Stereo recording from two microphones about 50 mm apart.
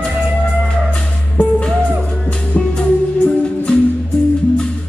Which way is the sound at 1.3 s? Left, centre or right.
Left.